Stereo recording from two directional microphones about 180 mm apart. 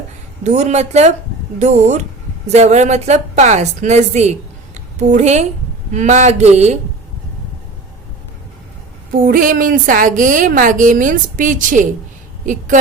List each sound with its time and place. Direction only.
0.4 s a woman's voice: 40° right (ahead or behind)
9.1 s a woman's voice: 50° right (ahead or behind)